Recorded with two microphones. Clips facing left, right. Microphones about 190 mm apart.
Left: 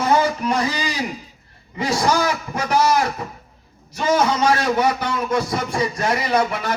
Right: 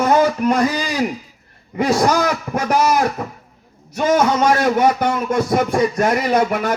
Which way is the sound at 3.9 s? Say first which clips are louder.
Right 3 dB; 50° right (ahead or behind).